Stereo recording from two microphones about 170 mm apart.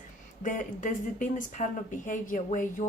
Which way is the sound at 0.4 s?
50° left (ahead or behind).